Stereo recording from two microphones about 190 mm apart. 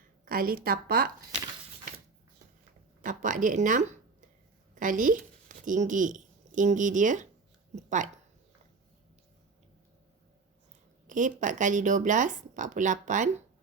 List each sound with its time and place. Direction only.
0.3 s speech: 50° right (ahead or behind)
3.0 s speech: 45° right (ahead or behind)
11.0 s speech: 40° right (ahead or behind)